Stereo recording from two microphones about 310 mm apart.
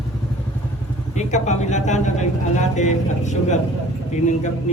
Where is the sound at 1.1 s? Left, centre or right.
Left.